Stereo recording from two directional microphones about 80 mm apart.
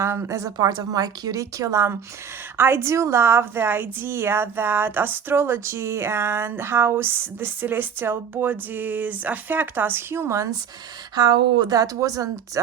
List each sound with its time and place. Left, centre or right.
0.0 s a woman's voice: right
0.5 s a woman's voice: right
11.1 s a woman's voice: right